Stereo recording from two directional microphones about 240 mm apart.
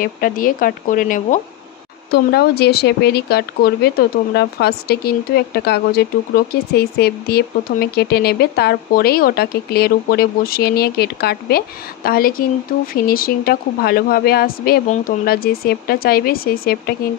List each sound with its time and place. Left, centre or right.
0.0 s speech: left